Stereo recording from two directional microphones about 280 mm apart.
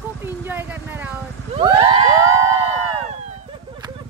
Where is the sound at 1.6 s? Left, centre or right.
Centre.